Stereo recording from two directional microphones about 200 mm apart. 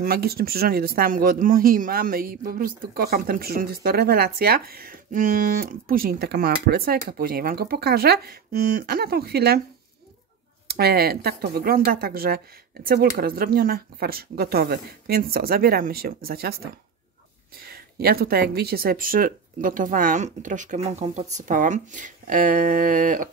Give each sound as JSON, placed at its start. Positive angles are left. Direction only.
{"t": 0.0, "sound": "speech", "side_deg": -50}
{"t": 10.7, "sound": "speech", "side_deg": -50}
{"t": 17.6, "sound": "speech", "side_deg": -50}